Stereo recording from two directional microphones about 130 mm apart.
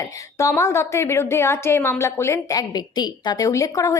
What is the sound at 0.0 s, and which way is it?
A woman's voice, 25° left (ahead or behind).